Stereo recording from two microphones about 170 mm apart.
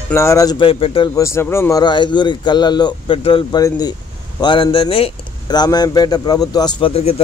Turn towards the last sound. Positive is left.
turn(degrees=35)  # may be behind; listen again after turning